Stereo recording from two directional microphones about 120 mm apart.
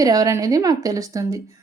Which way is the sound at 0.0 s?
30° right (ahead or behind).